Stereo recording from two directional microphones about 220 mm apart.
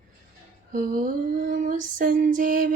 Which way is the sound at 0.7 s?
35° right (ahead or behind).